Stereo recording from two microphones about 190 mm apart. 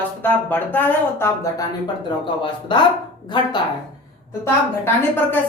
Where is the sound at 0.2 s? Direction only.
10° left (ahead or behind).